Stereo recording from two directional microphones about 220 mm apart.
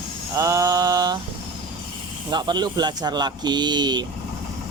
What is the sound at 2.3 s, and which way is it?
Speech, 20° right (ahead or behind).